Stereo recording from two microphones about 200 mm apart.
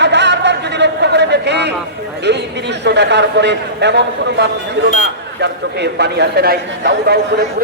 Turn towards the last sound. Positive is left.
turn(degrees=-55)  # may be behind; listen again after turning